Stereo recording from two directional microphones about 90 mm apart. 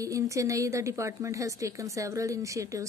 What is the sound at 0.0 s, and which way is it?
A woman's voice, 35° right (ahead or behind).